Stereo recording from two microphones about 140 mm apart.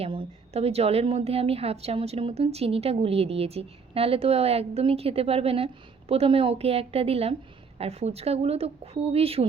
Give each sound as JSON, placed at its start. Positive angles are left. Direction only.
{"t": 0.0, "sound": "a woman's voice", "side_deg": -40}